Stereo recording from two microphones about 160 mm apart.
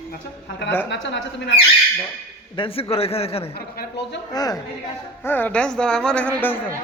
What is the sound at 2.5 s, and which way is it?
Speech, 35° left (ahead or behind).